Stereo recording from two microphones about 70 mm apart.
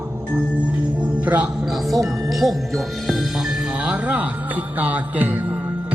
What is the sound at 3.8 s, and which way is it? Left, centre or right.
Music, centre.